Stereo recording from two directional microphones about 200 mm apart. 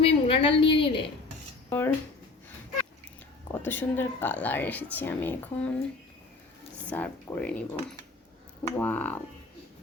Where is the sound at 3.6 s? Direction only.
10° left (ahead or behind).